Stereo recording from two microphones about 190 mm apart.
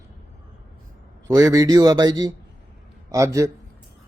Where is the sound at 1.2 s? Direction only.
20° right (ahead or behind).